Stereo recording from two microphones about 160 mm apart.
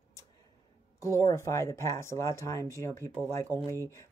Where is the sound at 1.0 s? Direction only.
20° left (ahead or behind).